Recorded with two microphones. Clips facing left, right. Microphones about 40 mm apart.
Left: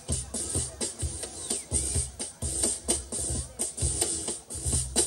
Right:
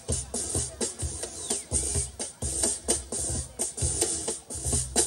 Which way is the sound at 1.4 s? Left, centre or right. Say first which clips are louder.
Right 1 dB; right.